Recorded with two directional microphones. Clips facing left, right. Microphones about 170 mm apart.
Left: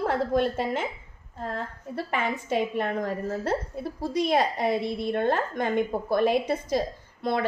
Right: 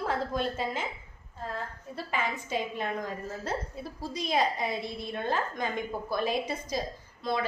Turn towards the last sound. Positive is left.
turn(degrees=60)  # may be behind; listen again after turning